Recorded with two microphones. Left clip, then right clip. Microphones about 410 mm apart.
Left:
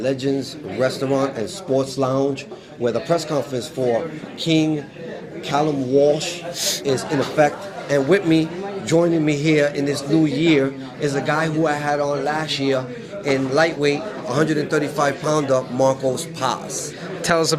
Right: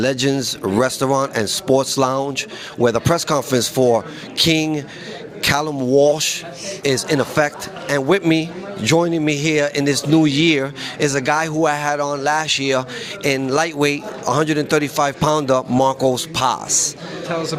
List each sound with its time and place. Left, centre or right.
0.0 s speech: right
17.2 s a man's voice: left